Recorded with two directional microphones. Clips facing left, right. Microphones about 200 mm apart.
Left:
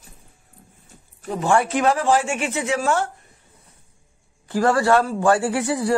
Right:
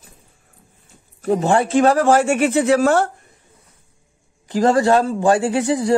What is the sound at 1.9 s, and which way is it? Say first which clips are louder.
Speech: right 5 dB; 45° right (ahead or behind).